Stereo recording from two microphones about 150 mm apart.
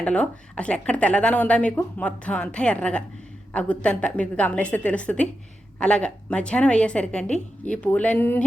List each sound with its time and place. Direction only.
0.0 s speech: 10° left (ahead or behind)